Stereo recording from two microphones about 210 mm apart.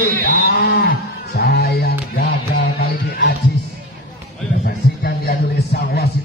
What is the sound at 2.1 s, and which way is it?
Music, 50° left (ahead or behind).